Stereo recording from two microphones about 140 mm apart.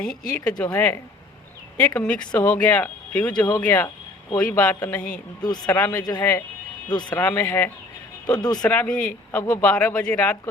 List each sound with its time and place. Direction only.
0.0 s speech: 5° left (ahead or behind)
2.0 s speech: 10° left (ahead or behind)
6.0 s speech: 25° left (ahead or behind)
7.1 s speech: 15° left (ahead or behind)
8.3 s speech: 30° left (ahead or behind)
8.6 s speech: 10° left (ahead or behind)